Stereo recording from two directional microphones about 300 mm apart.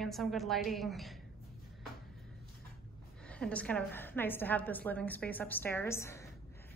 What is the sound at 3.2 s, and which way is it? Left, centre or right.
A woman's voice, centre.